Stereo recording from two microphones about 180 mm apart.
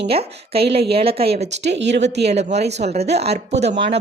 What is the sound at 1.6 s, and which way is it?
Speech, 75° right (ahead or behind).